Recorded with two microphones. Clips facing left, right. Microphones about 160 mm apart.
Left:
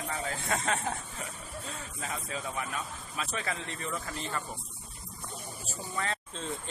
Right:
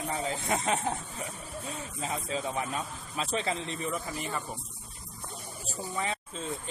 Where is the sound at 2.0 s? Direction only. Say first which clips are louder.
Right 5 dB; 25° right (ahead or behind).